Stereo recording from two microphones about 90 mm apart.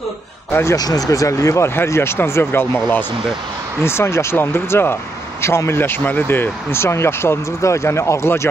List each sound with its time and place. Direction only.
0.5 s speech: 25° left (ahead or behind)
0.7 s speech: 45° left (ahead or behind)